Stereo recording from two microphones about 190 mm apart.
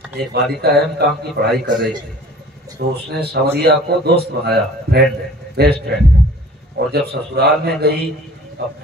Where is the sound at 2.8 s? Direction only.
55° right (ahead or behind).